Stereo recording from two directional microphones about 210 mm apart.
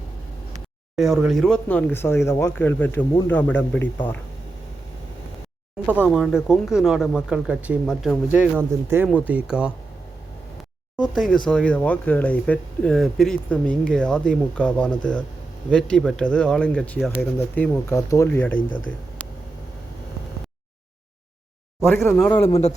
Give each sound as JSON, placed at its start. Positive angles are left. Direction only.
{"t": 0.9, "sound": "speech", "side_deg": 0}
{"t": 5.8, "sound": "speech", "side_deg": -5}
{"t": 10.9, "sound": "speech", "side_deg": 0}
{"t": 21.8, "sound": "speech", "side_deg": 10}
{"t": 22.4, "sound": "a man's voice", "side_deg": 30}